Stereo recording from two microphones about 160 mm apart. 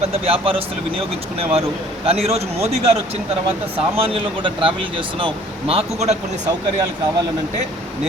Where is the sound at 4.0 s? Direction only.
35° right (ahead or behind).